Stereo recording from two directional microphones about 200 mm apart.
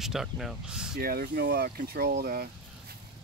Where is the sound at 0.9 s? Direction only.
50° right (ahead or behind).